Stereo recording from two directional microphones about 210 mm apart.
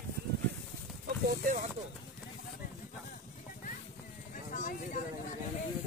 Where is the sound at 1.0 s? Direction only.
50° right (ahead or behind).